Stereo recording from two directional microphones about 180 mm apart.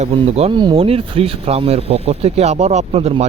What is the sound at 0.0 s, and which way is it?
A man's voice, 35° right (ahead or behind).